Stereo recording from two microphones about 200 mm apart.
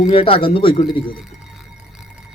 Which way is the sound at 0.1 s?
30° left (ahead or behind).